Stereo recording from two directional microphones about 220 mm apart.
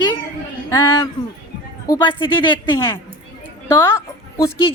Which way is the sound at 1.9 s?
20° left (ahead or behind).